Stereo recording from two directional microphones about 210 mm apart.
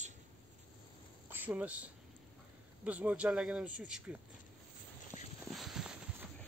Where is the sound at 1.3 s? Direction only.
10° right (ahead or behind).